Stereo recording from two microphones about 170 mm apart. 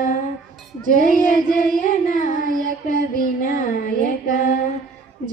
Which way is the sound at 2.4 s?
50° right (ahead or behind).